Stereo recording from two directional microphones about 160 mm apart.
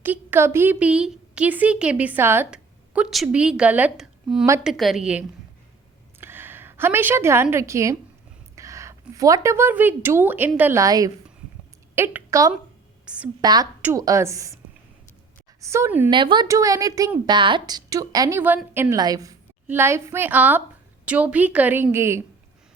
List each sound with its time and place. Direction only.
0.0 s a woman's voice: 10° right (ahead or behind)
6.1 s a sound: 15° right (ahead or behind)
7.5 s a woman's voice: 20° right (ahead or behind)
13.1 s a woman's voice: 10° right (ahead or behind)
13.4 s a woman's voice: 25° right (ahead or behind)
15.6 s a woman's voice: 15° right (ahead or behind)
16.0 s a woman's voice: 30° right (ahead or behind)
16.5 s a woman's voice: 20° right (ahead or behind)